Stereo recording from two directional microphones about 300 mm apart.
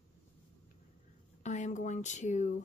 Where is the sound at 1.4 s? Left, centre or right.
Left.